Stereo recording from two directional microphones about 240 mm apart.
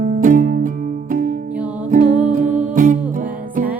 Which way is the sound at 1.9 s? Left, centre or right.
Right.